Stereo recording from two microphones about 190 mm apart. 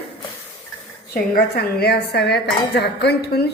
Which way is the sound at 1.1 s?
55° left (ahead or behind).